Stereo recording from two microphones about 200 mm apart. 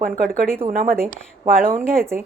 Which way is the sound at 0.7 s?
45° right (ahead or behind).